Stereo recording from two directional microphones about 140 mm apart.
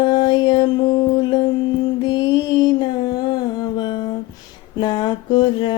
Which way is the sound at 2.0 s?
30° left (ahead or behind).